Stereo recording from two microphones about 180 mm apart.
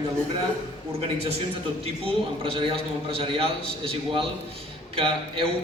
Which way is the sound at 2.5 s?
30° right (ahead or behind).